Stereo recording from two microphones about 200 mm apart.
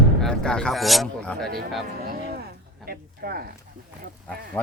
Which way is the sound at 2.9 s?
50° right (ahead or behind).